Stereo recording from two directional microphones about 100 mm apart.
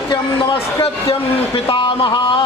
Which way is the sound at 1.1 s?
60° left (ahead or behind).